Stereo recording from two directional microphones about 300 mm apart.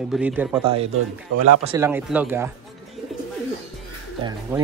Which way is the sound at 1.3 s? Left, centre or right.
Right.